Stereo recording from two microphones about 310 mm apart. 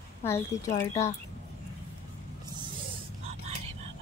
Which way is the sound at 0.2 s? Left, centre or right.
Centre.